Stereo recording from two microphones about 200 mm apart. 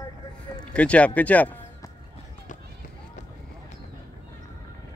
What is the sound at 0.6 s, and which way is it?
Music, 5° left (ahead or behind).